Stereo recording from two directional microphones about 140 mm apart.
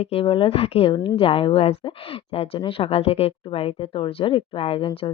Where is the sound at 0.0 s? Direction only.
45° left (ahead or behind).